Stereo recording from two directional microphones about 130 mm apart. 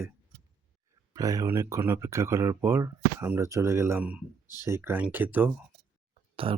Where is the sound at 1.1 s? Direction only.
25° right (ahead or behind).